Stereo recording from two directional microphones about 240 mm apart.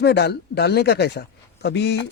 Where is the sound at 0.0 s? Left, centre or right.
Left.